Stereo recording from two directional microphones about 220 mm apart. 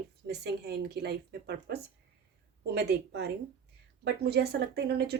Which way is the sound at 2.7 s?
50° right (ahead or behind).